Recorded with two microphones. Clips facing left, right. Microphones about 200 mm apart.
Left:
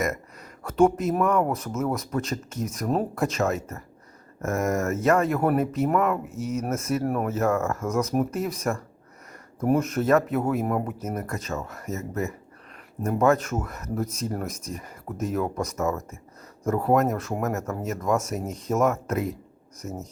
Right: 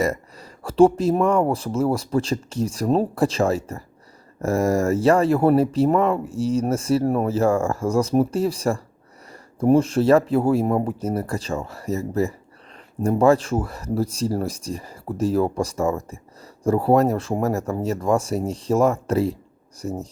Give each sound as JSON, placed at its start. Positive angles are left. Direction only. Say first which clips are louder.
{"t": 0.0, "sound": "speech", "louder": "right 5 dB", "side_deg": -30}